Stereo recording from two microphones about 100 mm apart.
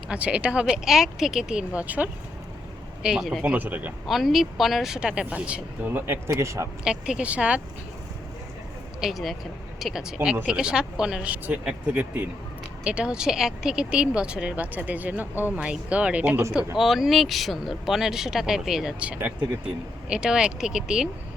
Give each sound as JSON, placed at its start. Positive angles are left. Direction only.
{"t": 0.1, "sound": "speech", "side_deg": -10}
{"t": 3.4, "sound": "speech", "side_deg": -15}
{"t": 4.0, "sound": "speech", "side_deg": 0}
{"t": 6.8, "sound": "speech", "side_deg": -10}
{"t": 9.0, "sound": "speech", "side_deg": 0}
{"t": 16.7, "sound": "speech", "side_deg": 0}